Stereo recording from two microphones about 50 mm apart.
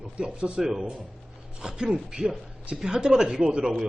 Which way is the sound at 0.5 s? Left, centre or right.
Centre.